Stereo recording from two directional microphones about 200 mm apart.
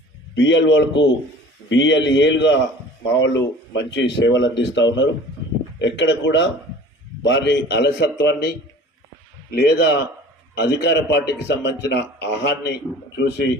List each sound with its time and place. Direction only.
0.3 s a man's voice: 65° left (ahead or behind)